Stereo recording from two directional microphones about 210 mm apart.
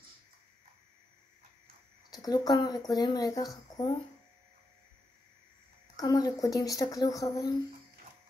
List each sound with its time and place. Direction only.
2.0 s a woman's voice: 15° left (ahead or behind)
5.9 s a woman's voice: 20° left (ahead or behind)